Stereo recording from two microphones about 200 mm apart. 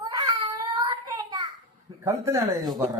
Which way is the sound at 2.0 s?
15° right (ahead or behind).